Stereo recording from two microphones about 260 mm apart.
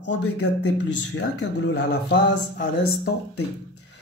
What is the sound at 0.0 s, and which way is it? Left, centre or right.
Speech, left.